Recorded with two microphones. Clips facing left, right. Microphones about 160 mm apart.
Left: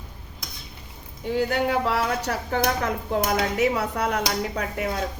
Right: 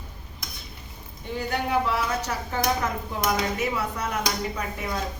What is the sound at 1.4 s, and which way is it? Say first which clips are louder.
A woman's voice: left 3 dB; 80° left.